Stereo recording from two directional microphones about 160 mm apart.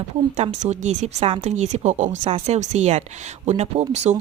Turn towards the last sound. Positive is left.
turn(degrees=-45)  # may be behind; listen again after turning